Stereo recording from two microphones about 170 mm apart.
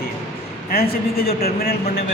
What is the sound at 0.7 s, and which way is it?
Speech, 60° left (ahead or behind).